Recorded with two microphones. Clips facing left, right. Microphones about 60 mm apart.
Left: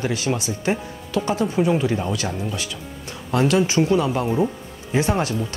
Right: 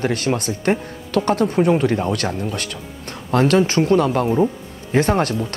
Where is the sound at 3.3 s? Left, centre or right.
Right.